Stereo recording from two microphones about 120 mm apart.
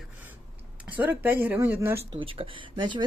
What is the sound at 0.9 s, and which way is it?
Speech, 15° right (ahead or behind).